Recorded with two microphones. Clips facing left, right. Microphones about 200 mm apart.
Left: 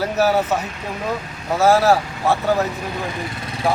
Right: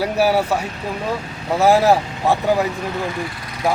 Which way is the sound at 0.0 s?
10° right (ahead or behind).